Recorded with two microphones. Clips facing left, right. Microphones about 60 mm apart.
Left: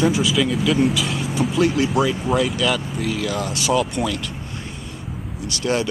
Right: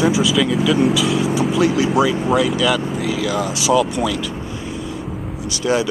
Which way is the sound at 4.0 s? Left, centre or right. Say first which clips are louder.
Right 3 dB; centre.